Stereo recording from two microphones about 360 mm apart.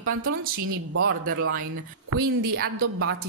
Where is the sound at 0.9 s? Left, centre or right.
Right.